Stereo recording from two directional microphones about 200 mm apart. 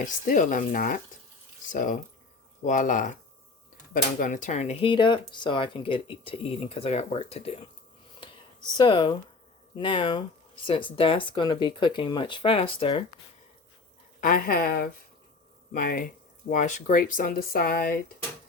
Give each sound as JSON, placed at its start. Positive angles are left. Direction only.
{"t": 0.0, "sound": "speech", "side_deg": 40}
{"t": 8.8, "sound": "speech", "side_deg": 25}
{"t": 14.2, "sound": "speech", "side_deg": 45}